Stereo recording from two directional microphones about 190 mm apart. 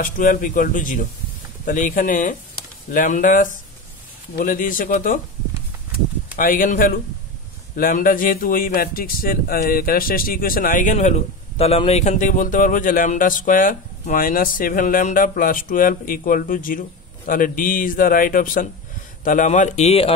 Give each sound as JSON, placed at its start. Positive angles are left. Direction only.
{"t": 0.0, "sound": "a man's voice", "side_deg": 45}
{"t": 6.3, "sound": "a man's voice", "side_deg": 45}